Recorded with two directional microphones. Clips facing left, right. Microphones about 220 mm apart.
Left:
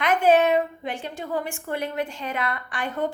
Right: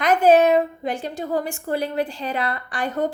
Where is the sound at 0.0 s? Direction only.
40° right (ahead or behind).